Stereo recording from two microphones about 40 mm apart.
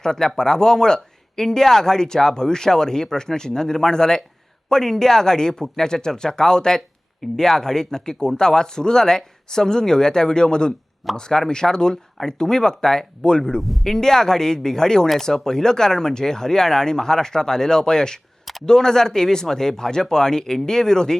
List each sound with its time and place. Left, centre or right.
0.0 s speech: centre
13.6 s speech: centre
13.9 s speech: centre